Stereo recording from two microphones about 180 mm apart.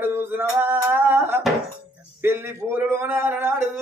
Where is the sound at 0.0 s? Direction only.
10° right (ahead or behind).